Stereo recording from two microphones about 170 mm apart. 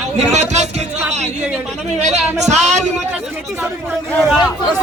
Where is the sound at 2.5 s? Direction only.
40° right (ahead or behind).